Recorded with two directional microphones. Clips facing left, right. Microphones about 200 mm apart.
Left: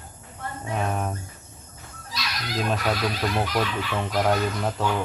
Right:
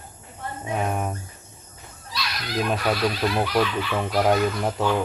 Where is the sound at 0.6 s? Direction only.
15° right (ahead or behind).